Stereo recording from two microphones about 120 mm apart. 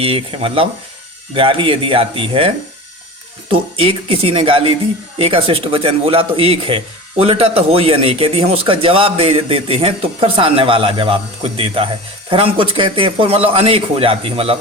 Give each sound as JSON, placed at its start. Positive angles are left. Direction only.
{"t": 0.0, "sound": "speech", "side_deg": -50}
{"t": 3.5, "sound": "speech", "side_deg": -50}